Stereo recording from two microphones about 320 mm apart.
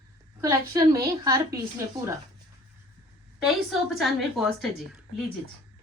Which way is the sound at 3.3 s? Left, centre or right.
Centre.